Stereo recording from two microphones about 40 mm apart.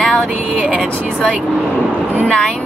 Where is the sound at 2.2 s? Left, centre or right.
Centre.